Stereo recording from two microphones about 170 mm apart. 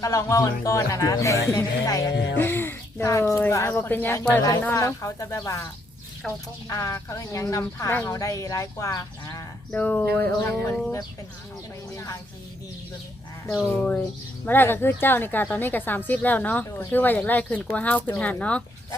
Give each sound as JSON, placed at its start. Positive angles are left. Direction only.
{"t": 0.0, "sound": "speech", "side_deg": 20}
{"t": 2.1, "sound": "speech", "side_deg": 90}
{"t": 2.4, "sound": "a woman's voice", "side_deg": 10}
{"t": 9.7, "sound": "a woman's voice", "side_deg": 10}
{"t": 13.5, "sound": "a woman's voice", "side_deg": 5}